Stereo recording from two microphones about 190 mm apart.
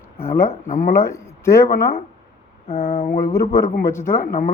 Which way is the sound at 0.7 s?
40° left (ahead or behind).